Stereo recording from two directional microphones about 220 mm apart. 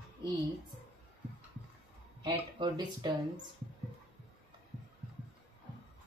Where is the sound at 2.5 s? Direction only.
20° right (ahead or behind).